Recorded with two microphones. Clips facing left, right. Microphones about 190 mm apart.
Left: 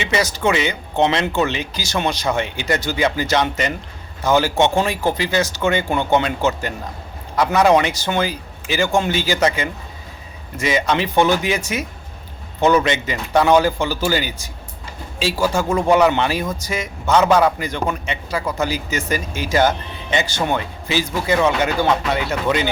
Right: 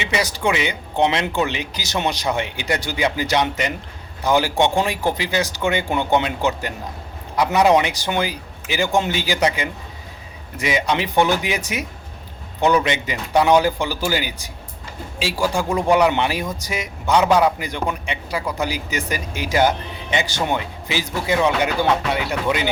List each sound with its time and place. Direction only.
0.0 s speech: 15° right (ahead or behind)